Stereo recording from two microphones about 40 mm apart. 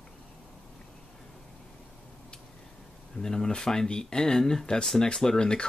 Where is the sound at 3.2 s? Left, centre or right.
Centre.